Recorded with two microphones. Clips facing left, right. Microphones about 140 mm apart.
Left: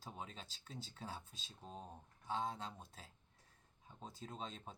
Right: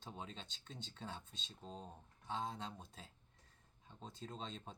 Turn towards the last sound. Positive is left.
turn(degrees=5)  # may be behind; listen again after turning